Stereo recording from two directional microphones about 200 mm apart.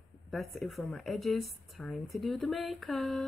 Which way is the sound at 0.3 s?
Centre (ahead or behind).